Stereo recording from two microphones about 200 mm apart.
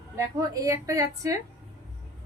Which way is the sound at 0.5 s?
15° right (ahead or behind).